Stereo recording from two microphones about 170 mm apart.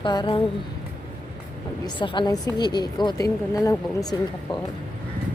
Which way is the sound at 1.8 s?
30° left (ahead or behind).